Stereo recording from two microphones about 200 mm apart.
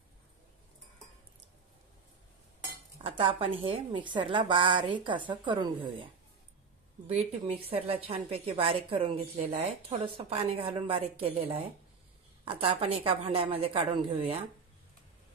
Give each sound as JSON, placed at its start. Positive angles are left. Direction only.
{"t": 3.0, "sound": "a woman's voice", "side_deg": -25}
{"t": 7.1, "sound": "a woman's voice", "side_deg": -30}